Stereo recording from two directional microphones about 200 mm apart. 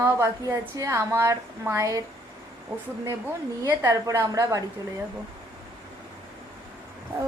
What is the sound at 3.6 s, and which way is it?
A woman's voice, 15° right (ahead or behind).